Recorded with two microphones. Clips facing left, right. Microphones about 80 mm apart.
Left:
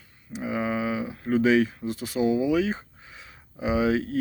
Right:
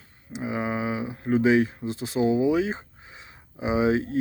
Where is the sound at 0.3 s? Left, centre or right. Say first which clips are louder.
Left 1 dB; centre.